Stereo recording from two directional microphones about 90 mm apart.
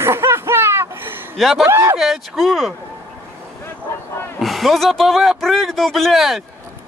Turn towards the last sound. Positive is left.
turn(degrees=0)  # may be behind; listen again after turning